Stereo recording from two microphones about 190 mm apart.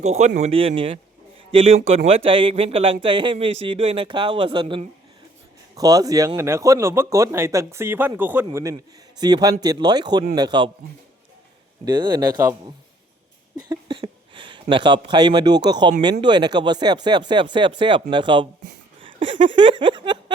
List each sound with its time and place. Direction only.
0.0 s a man's voice: 35° right (ahead or behind); by 8.4 s 10° right (ahead or behind)
8.7 s a man's voice: 20° right (ahead or behind)
11.9 s a man's voice: 20° right (ahead or behind)
13.7 s a man's voice: 25° right (ahead or behind)
19.0 s a sound: 25° right (ahead or behind)